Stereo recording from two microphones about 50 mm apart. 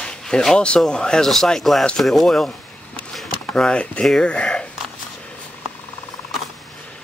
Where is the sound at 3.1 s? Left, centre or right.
Centre.